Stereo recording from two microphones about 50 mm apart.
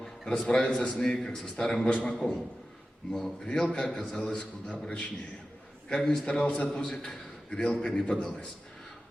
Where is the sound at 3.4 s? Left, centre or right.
Centre.